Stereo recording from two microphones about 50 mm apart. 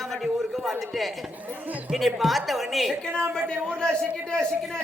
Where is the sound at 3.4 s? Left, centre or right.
Centre.